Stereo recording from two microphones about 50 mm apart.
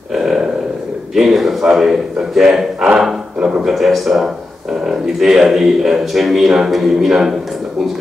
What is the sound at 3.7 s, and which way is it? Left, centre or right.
Speech, centre.